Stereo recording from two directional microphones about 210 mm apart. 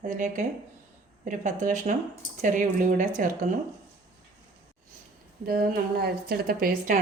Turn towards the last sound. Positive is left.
turn(degrees=-45)  # may be behind; listen again after turning